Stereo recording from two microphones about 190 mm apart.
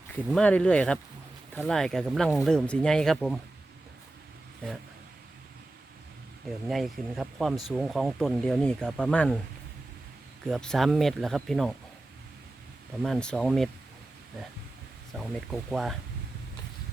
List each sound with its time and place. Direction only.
0.1 s speech: 5° left (ahead or behind)
6.7 s speech: centre (ahead or behind)
10.4 s speech: 5° left (ahead or behind)
13.0 s speech: 5° left (ahead or behind)
15.1 s speech: centre (ahead or behind)